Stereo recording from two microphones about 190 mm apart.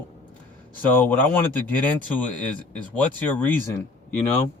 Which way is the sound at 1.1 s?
10° left (ahead or behind).